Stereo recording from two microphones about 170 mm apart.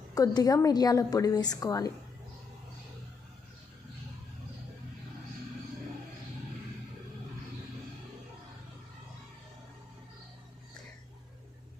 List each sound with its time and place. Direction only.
0.1 s a woman's voice: 20° left (ahead or behind)